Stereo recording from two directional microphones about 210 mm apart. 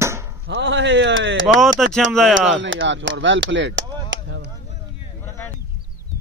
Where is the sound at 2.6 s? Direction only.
65° right (ahead or behind).